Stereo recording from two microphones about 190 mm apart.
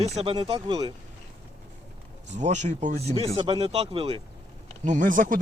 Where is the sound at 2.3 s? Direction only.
40° right (ahead or behind).